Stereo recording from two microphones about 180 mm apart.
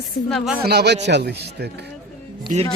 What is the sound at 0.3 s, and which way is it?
Speech, centre (ahead or behind).